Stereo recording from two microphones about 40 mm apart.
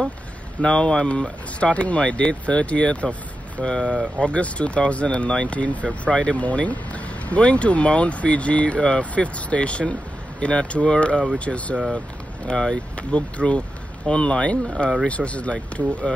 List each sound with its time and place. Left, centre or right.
0.6 s speech: left
3.6 s speech: centre
4.2 s speech: left
5.9 s speech: left
8.7 s speech: left
12.4 s speech: centre
12.9 s speech: left